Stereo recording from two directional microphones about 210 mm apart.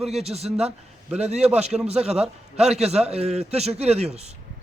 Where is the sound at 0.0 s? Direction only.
30° right (ahead or behind).